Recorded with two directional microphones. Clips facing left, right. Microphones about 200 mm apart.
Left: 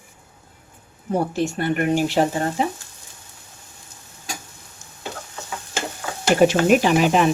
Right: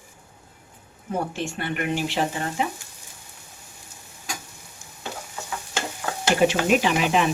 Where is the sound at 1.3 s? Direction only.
40° left (ahead or behind).